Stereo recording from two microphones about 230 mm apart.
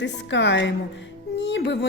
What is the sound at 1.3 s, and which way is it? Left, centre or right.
Music, left.